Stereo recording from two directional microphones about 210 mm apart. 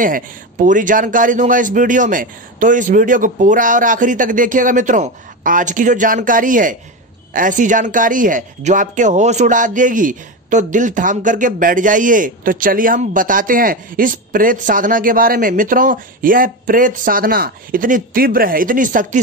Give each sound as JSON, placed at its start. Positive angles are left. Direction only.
{"t": 0.0, "sound": "speech", "side_deg": -40}